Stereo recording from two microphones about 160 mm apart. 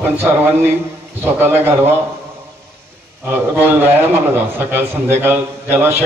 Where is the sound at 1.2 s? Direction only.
15° right (ahead or behind).